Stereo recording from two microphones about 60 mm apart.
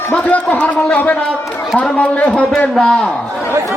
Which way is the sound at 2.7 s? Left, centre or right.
Centre.